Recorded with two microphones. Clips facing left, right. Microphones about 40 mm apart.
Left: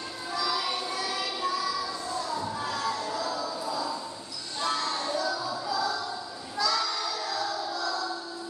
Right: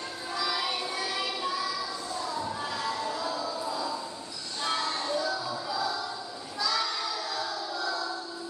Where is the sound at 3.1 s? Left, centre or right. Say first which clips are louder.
Left 1 dB; centre.